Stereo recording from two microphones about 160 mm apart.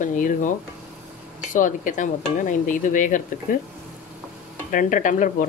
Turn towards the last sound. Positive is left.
turn(degrees=55)  # may be behind; listen again after turning